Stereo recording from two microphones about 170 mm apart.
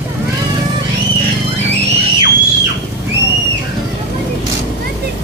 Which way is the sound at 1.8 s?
40° right (ahead or behind).